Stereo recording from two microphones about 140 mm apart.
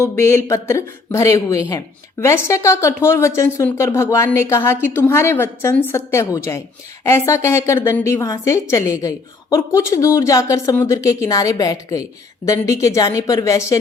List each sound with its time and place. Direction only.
0.0 s a woman's voice: 20° left (ahead or behind)